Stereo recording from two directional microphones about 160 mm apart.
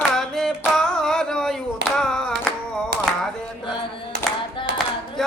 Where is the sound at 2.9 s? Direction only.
90° right.